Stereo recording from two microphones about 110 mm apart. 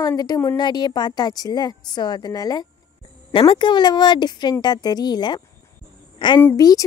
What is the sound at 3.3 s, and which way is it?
A woman's voice, 50° left (ahead or behind).